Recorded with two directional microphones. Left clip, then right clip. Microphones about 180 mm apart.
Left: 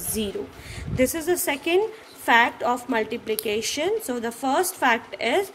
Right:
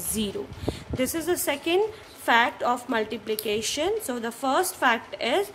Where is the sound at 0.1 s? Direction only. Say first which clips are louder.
Left 2 dB; 20° right (ahead or behind).